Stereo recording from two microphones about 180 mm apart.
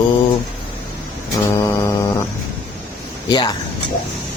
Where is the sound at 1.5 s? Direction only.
15° left (ahead or behind).